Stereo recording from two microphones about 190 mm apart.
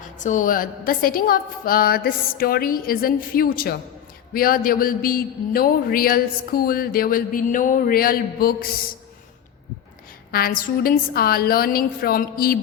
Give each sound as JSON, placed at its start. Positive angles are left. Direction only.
{"t": 0.0, "sound": "a man's voice", "side_deg": 40}
{"t": 10.3, "sound": "a man's voice", "side_deg": 50}